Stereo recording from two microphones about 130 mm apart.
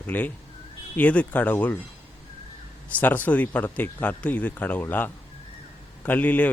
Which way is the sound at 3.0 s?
15° left (ahead or behind).